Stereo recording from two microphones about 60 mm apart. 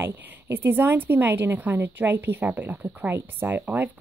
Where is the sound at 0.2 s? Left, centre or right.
Right.